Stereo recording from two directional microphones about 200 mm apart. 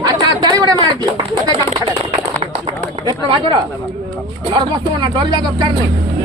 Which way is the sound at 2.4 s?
30° right (ahead or behind).